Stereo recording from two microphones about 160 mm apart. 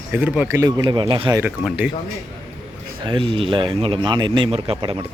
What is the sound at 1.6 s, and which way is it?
Speech, 5° right (ahead or behind).